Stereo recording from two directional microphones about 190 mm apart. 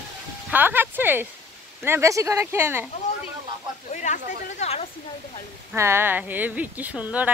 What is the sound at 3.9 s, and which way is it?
Speech, 40° left (ahead or behind).